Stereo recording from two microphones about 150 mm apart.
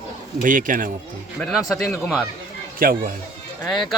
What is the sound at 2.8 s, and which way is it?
Speech, 70° right (ahead or behind).